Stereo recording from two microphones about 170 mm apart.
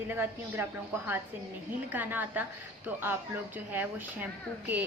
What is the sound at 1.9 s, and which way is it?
A woman's voice, 10° right (ahead or behind).